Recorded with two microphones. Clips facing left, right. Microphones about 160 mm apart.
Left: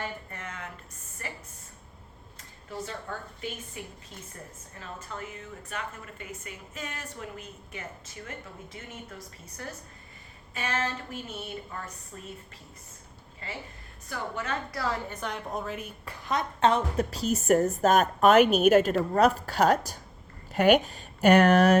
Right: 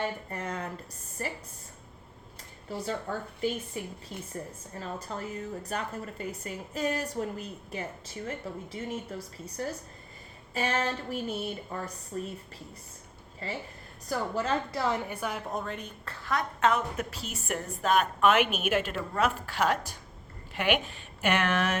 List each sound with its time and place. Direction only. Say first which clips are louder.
0.0 s a sound: right 4 dB; 35° right (ahead or behind)
1.2 s a woman's voice: right 5 dB; 35° right (ahead or behind)
3.1 s a woman's voice: right 4 dB; 40° right (ahead or behind)
4.8 s a woman's voice: right 3 dB; 35° right (ahead or behind)
14.1 s a woman's voice: right 4 dB; 30° right (ahead or behind)
15.1 s a woman's voice: right 1 dB; 5° right (ahead or behind); by 21.8 s 40° left (ahead or behind)